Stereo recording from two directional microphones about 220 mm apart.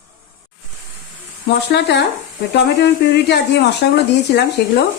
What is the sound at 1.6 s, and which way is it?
Speech, 50° left (ahead or behind).